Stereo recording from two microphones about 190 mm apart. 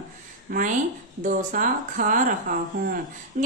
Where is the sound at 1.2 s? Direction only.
45° right (ahead or behind).